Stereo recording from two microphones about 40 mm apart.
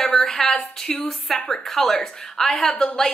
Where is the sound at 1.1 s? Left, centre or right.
Centre.